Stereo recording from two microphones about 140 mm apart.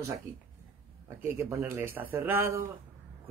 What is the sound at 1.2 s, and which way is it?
A man's voice, 15° right (ahead or behind).